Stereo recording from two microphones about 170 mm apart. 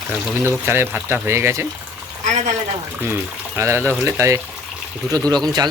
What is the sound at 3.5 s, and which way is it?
Speech, 15° right (ahead or behind).